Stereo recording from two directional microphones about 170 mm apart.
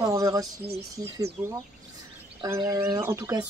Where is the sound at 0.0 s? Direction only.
20° right (ahead or behind).